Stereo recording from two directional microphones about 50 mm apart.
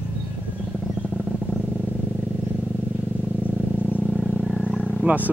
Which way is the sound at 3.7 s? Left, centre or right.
Right.